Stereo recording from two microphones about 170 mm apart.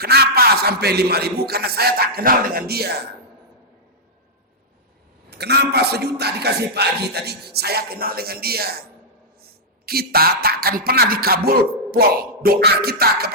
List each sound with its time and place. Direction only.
0.0 s a man's voice: 70° right (ahead or behind)
5.3 s a man's voice: 75° right (ahead or behind)